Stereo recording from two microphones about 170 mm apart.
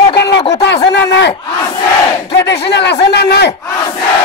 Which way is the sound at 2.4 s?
85° left.